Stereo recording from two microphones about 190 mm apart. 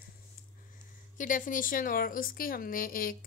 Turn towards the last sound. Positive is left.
turn(degrees=50)  # may be behind; listen again after turning